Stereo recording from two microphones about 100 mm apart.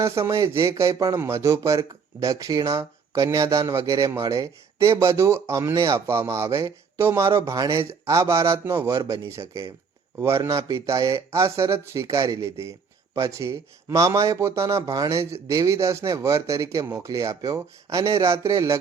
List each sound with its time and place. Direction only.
0.0 s a man's voice: 30° right (ahead or behind)